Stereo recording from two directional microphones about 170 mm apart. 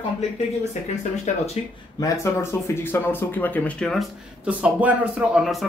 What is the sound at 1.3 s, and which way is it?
Speech, 40° left (ahead or behind).